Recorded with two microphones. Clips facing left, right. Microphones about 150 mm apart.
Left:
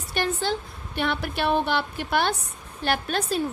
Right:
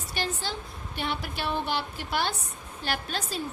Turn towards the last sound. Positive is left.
turn(degrees=60)  # may be behind; listen again after turning